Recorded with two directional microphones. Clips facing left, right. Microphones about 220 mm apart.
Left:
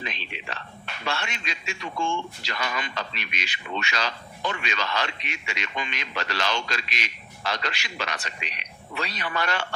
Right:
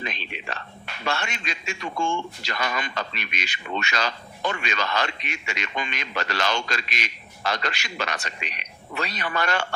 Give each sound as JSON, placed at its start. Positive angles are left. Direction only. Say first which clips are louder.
{"t": 0.0, "sound": "a man's voice", "louder": "right 2 dB", "side_deg": -45}